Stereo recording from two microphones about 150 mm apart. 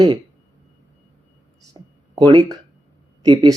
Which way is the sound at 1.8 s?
30° right (ahead or behind).